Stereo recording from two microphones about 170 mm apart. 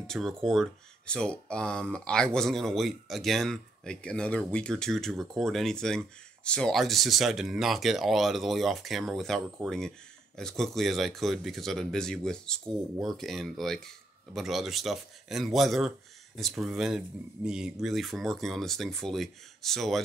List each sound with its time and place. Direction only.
0.0 s speech: 5° left (ahead or behind)